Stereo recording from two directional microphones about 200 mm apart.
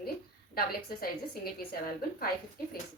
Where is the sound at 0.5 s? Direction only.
50° left (ahead or behind).